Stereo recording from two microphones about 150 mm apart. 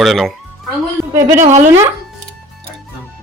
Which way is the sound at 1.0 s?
Centre (ahead or behind).